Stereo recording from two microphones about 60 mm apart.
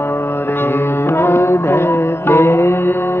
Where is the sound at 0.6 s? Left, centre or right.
Left.